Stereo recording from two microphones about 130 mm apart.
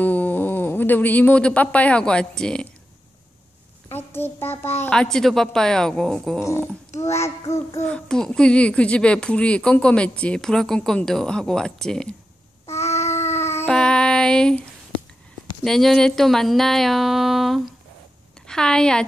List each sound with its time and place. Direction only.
0.0 s speech: 10° left (ahead or behind)
3.9 s speech: 15° left (ahead or behind)
4.9 s a sound: 5° left (ahead or behind)
6.4 s a child's voice: 20° left (ahead or behind)
7.8 s speech: 5° left (ahead or behind)
12.6 s babbling: 55° left (ahead or behind)
12.9 s baby cry: 20° left (ahead or behind)
13.7 s a sound: 5° left (ahead or behind)
15.6 s a sound: centre (ahead or behind)